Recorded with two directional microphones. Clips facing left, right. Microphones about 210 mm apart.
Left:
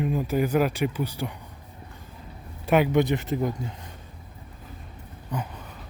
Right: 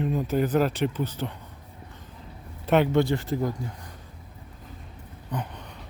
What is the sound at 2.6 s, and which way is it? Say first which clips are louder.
Speech: even; 10° left (ahead or behind).